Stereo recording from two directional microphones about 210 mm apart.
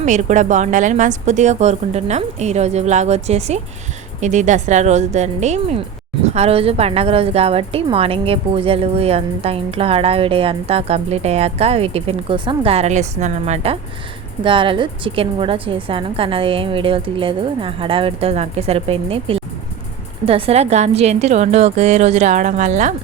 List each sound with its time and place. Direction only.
0.0 s speech: 35° right (ahead or behind)